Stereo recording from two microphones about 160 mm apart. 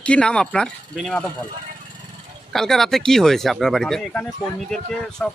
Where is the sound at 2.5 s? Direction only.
Centre (ahead or behind).